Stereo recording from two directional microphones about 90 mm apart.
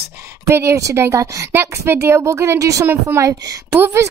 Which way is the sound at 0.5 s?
30° right (ahead or behind).